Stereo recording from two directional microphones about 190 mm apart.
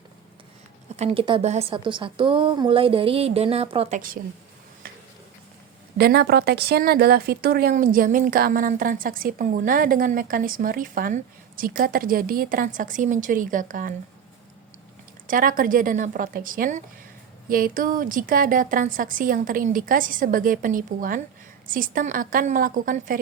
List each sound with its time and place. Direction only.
0.9 s a woman's voice: 30° right (ahead or behind)
6.0 s speech: 55° right (ahead or behind)
15.3 s speech: 45° right (ahead or behind)